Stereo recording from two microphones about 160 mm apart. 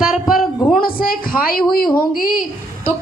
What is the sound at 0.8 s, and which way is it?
A woman's voice, 65° left (ahead or behind).